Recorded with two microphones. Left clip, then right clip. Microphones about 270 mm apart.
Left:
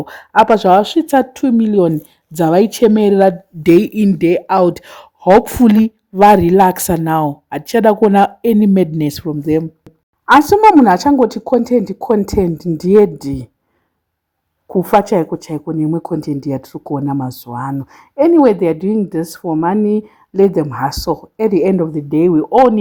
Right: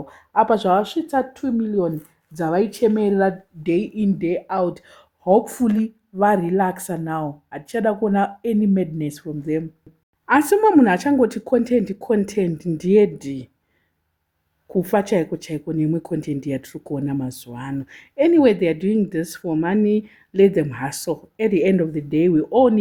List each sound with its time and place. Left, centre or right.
0.0 s speech: left
10.6 s speech: centre
14.7 s speech: centre